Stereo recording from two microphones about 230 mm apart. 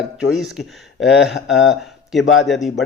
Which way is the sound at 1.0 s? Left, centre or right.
Left.